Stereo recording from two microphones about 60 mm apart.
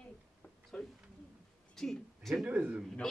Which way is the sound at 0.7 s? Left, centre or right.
Centre.